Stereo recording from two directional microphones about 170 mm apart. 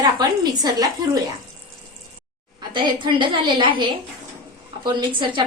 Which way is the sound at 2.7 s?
30° right (ahead or behind).